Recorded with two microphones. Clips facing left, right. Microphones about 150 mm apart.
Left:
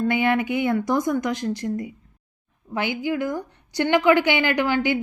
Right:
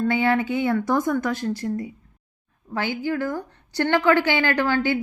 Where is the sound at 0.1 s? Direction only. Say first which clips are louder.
Even; 15° left (ahead or behind).